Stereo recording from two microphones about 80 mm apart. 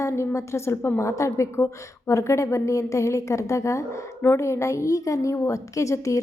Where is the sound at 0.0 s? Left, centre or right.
Left.